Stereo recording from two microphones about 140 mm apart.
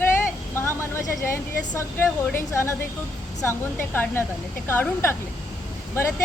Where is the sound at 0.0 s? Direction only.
15° left (ahead or behind).